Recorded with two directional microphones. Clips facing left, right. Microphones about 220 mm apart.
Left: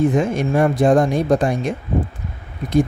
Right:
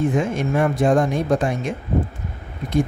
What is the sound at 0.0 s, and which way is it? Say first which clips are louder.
Speech: left 3 dB; 40° left (ahead or behind).